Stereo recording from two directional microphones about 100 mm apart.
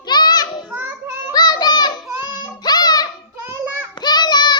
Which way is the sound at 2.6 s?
45° left (ahead or behind).